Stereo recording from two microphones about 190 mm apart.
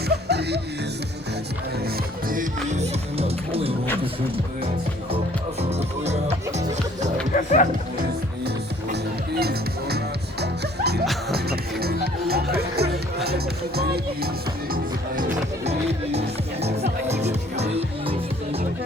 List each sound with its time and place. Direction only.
0.1 s music: 60° right (ahead or behind)
2.2 s music: 45° right (ahead or behind)
6.1 s music: 35° right (ahead or behind)
7.3 s speech: 40° left (ahead or behind)
9.4 s music: 55° right (ahead or behind)
13.2 s speech: 55° right (ahead or behind)
14.7 s music: 45° right (ahead or behind)